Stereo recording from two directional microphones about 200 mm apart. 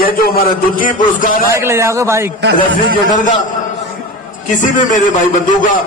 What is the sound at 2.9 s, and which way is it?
Speech, 40° left (ahead or behind).